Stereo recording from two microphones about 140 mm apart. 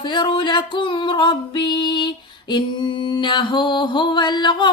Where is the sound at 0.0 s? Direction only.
30° left (ahead or behind).